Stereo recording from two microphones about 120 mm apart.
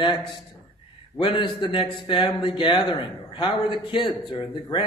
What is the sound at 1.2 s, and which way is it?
A man's voice, 45° left (ahead or behind).